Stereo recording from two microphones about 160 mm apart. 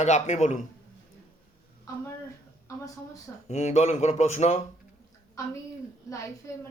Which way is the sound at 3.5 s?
45° left (ahead or behind).